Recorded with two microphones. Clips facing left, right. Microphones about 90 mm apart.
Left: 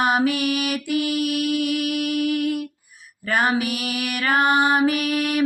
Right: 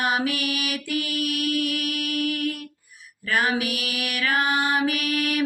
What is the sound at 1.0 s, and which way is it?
Mantra, 25° left (ahead or behind).